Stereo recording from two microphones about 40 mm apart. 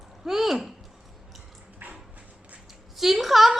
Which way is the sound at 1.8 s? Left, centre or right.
Right.